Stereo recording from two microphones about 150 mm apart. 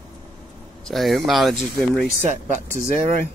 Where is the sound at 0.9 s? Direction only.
Centre (ahead or behind).